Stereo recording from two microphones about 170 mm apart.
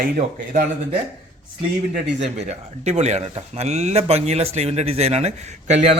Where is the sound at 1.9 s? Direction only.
45° right (ahead or behind).